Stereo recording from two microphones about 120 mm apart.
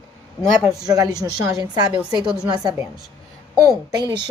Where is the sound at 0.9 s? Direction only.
30° right (ahead or behind).